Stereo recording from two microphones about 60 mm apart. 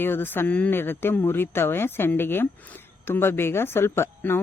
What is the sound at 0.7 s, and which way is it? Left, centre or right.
A woman's voice, left.